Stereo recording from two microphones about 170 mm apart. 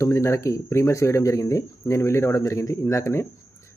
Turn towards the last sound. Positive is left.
turn(degrees=20)  # may be behind; listen again after turning